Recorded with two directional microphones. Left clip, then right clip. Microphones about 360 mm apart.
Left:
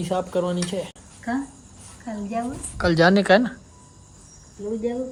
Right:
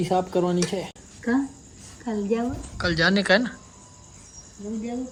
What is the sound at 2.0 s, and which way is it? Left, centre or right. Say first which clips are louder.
Speech: right 3 dB; centre.